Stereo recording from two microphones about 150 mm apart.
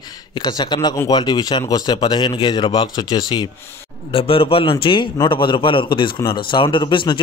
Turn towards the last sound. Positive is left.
turn(degrees=30)  # may be behind; listen again after turning